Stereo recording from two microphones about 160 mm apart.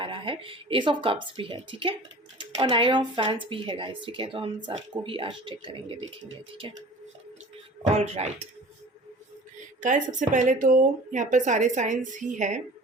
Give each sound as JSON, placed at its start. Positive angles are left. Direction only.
{"t": 0.0, "sound": "a woman's voice", "side_deg": -30}
{"t": 7.8, "sound": "speech", "side_deg": -40}
{"t": 9.8, "sound": "speech", "side_deg": -55}